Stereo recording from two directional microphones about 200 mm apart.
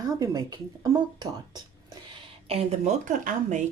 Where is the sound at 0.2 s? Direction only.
20° right (ahead or behind).